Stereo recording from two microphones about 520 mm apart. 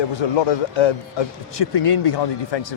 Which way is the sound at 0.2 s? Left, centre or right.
Left.